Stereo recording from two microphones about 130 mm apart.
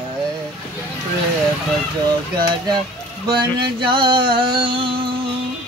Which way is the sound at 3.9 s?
40° right (ahead or behind).